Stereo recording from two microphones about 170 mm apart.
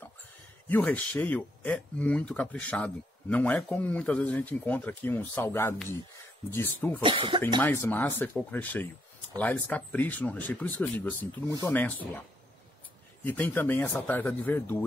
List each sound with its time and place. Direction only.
0.7 s speech: 10° left (ahead or behind)
7.0 s speech: 30° right (ahead or behind)
7.6 s speech: 10° left (ahead or behind)
13.2 s speech: 10° left (ahead or behind)